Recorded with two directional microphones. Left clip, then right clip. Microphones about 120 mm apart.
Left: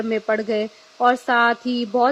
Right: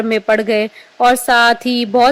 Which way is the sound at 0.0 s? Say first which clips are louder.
Right 7 dB; 50° right (ahead or behind).